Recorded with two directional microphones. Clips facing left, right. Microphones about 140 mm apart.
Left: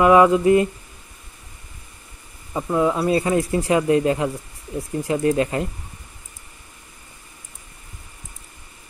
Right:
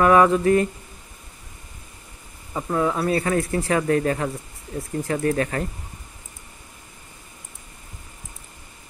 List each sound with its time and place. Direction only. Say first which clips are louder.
0.0 s mantra: left 2 dB; 15° left (ahead or behind)
2.5 s speech: left 3 dB; 15° left (ahead or behind)